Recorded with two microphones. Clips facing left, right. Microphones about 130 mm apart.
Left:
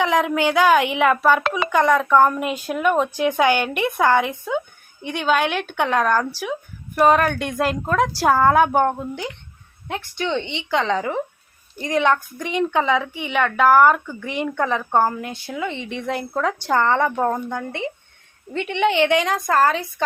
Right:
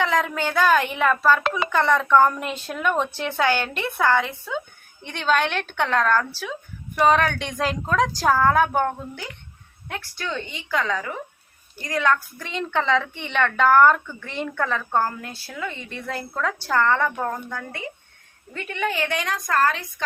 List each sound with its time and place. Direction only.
0.0 s a woman's voice: 15° left (ahead or behind); by 20.1 s 35° left (ahead or behind)